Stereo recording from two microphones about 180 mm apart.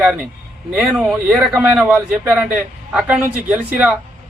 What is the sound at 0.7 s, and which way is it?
A man's voice, 5° right (ahead or behind).